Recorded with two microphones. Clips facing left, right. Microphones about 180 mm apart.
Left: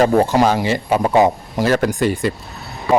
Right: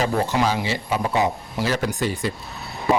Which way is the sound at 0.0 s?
50° left (ahead or behind).